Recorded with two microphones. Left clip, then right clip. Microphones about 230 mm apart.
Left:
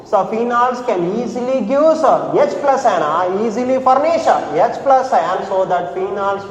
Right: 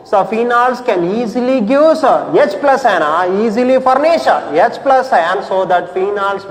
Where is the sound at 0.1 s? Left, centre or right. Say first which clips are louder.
Right 3 dB; right.